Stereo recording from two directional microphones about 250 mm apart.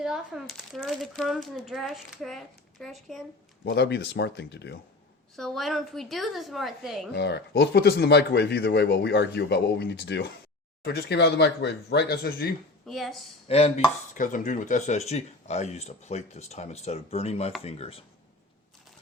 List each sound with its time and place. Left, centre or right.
0.0 s a child's voice: centre
3.6 s speech: left
5.4 s a child's voice: centre
7.1 s speech: left
12.8 s speech: centre
13.5 s speech: left